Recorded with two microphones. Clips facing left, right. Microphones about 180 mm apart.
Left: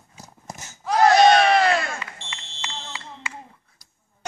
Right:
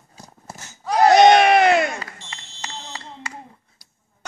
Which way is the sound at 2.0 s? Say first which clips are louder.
Even; 40° right (ahead or behind).